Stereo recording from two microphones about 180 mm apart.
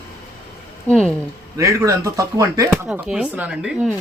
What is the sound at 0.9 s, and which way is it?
Speech, 5° left (ahead or behind).